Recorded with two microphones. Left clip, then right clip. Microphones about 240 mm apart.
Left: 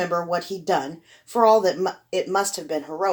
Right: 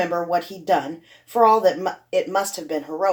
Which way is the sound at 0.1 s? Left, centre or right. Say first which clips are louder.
Right 2 dB; left.